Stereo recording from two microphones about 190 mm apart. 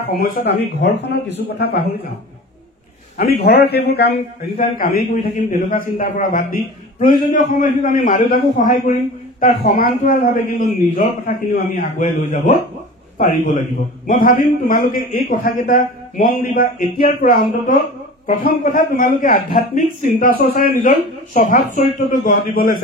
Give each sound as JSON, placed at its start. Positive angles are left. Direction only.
{"t": 0.1, "sound": "speech", "side_deg": 50}
{"t": 3.2, "sound": "a man's voice", "side_deg": 50}